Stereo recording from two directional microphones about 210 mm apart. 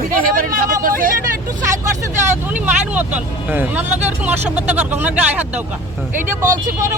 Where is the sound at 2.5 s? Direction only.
5° right (ahead or behind).